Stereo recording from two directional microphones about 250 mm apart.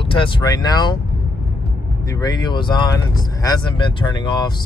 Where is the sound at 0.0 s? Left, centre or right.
Left.